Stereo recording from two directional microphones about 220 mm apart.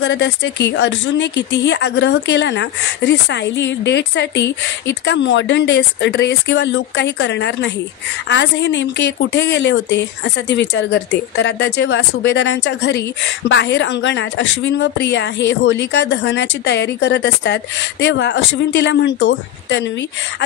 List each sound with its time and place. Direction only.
0.0 s speech: 55° left (ahead or behind)